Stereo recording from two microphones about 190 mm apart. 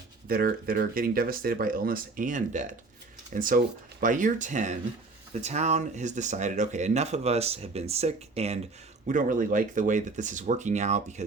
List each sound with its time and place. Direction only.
0.3 s speech: 55° right (ahead or behind); by 11.0 s 40° right (ahead or behind)